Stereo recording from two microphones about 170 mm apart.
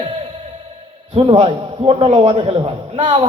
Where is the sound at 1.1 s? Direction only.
35° right (ahead or behind).